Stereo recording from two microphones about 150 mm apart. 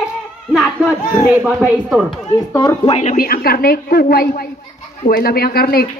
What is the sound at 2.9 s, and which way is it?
Speech, 50° left (ahead or behind).